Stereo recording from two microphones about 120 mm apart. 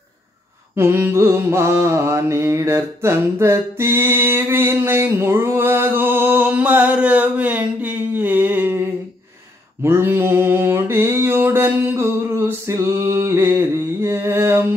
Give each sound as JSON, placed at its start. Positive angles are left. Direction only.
{"t": 0.7, "sound": "mantra", "side_deg": -20}
{"t": 7.8, "sound": "a sound", "side_deg": -15}
{"t": 9.8, "sound": "mantra", "side_deg": -20}